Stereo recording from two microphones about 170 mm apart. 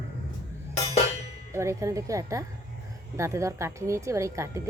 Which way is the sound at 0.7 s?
40° left (ahead or behind).